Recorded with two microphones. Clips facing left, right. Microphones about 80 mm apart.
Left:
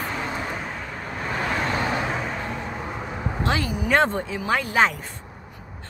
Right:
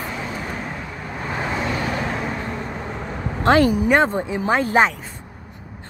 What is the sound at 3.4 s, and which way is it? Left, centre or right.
Speech, right.